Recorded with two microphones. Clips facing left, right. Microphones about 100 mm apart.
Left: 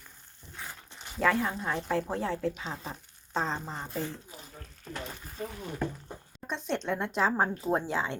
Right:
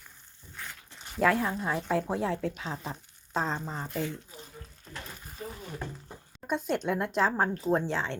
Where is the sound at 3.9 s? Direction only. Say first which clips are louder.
Right 2 dB; 35° left (ahead or behind).